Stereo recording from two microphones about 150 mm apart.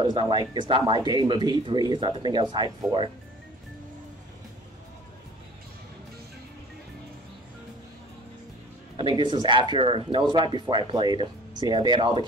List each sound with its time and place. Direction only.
0.0 s speech: 30° right (ahead or behind)
9.1 s speech: 30° right (ahead or behind)